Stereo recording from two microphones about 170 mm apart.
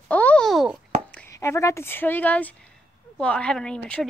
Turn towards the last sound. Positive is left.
turn(degrees=5)  # may be behind; listen again after turning